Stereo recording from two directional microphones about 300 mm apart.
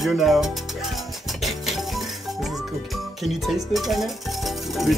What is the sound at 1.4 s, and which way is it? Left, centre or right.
Music, centre.